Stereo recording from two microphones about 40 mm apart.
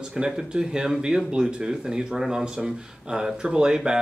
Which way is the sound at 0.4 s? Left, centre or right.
Centre.